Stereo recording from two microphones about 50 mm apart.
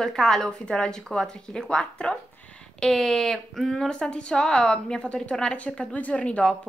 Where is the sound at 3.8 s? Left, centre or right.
Centre.